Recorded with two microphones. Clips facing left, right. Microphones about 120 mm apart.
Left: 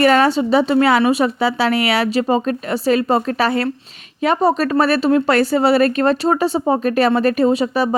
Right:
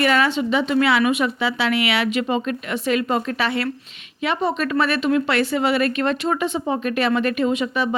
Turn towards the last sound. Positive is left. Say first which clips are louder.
# left 5 dB
turn(degrees=35)  # may be behind; listen again after turning